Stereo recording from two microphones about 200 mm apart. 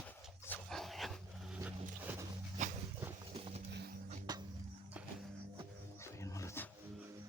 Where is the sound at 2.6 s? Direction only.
35° right (ahead or behind).